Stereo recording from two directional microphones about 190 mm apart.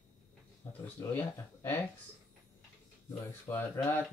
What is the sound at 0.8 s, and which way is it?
Speech, 10° left (ahead or behind).